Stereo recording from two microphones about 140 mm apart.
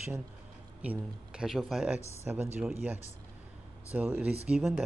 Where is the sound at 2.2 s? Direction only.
15° right (ahead or behind).